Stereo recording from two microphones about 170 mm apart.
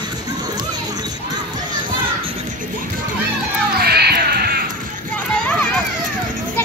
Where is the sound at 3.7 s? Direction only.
70° right (ahead or behind).